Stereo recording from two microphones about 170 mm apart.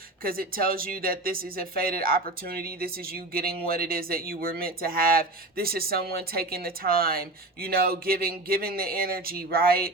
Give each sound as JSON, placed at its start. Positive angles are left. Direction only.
{"t": 0.2, "sound": "speech", "side_deg": -60}